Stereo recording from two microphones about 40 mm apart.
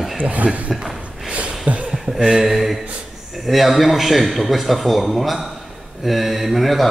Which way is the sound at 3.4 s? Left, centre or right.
Centre.